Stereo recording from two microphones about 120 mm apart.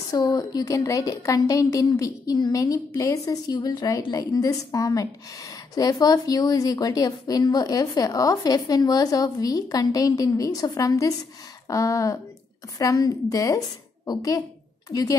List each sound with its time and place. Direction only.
0.1 s a woman's voice: 30° left (ahead or behind)